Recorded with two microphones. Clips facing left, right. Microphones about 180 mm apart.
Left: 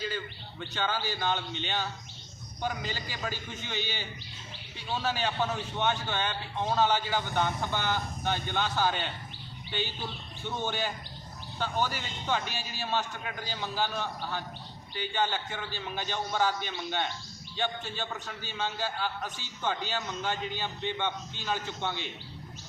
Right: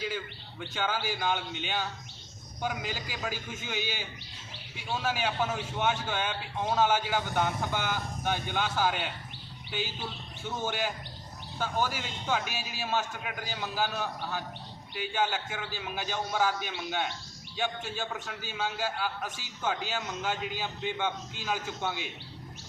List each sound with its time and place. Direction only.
0.7 s a man's voice: 10° right (ahead or behind)
10.4 s a man's voice: 5° right (ahead or behind)